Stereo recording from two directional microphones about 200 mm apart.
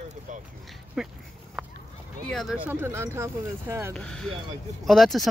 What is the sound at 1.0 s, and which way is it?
Speech, centre (ahead or behind).